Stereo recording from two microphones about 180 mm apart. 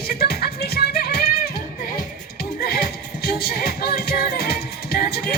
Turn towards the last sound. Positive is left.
turn(degrees=55)  # may be behind; listen again after turning